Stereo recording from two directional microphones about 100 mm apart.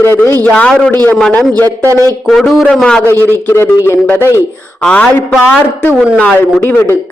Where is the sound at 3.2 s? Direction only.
20° left (ahead or behind).